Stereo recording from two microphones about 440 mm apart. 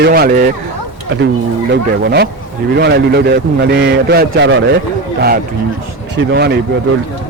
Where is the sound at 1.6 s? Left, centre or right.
Right.